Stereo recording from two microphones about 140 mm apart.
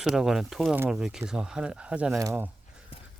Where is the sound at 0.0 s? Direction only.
5° right (ahead or behind).